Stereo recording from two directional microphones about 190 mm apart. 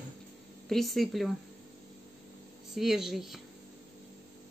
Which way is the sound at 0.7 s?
Centre (ahead or behind).